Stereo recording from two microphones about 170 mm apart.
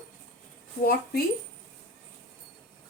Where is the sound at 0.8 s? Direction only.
60° left (ahead or behind).